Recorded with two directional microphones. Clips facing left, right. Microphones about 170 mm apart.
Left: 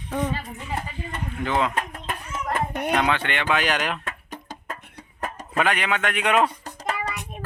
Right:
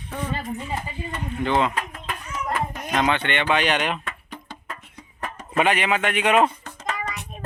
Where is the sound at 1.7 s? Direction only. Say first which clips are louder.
Left 1 dB; 50° left (ahead or behind).